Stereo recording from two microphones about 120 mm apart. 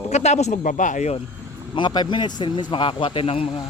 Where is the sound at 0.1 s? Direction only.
65° left (ahead or behind); by 1.1 s 90° left.